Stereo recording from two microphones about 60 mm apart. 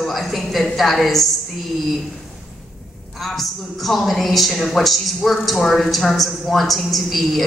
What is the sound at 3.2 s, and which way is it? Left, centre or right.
A man's voice, centre.